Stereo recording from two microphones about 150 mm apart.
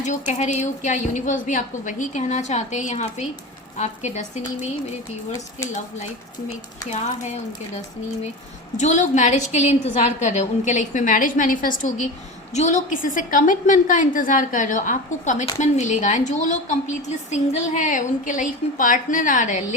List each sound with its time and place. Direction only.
0.0 s a woman's voice: 55° left (ahead or behind)
6.8 s a woman's voice: 50° left (ahead or behind)
8.8 s a woman's voice: 55° left (ahead or behind)